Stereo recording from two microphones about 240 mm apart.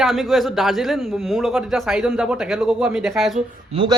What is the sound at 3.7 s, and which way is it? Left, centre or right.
Speech, right.